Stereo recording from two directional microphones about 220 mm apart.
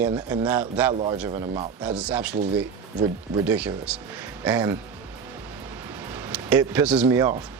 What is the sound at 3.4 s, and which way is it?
Speech, 5° right (ahead or behind).